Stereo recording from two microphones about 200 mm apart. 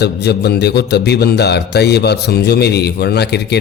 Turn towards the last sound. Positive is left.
turn(degrees=55)  # may be behind; listen again after turning